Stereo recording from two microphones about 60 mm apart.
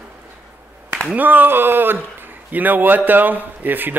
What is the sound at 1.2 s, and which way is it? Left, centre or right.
A man's voice, right.